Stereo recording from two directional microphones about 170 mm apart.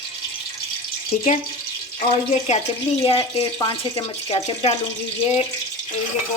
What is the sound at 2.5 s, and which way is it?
Speech, 35° left (ahead or behind).